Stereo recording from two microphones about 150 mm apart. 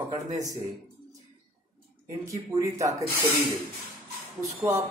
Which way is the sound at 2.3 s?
20° right (ahead or behind).